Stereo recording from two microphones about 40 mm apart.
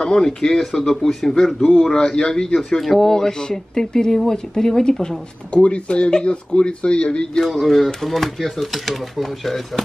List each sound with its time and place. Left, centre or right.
0.0 s speech: centre
2.0 s speech: left
2.8 s speech: centre
5.5 s speech: left
7.4 s speech: centre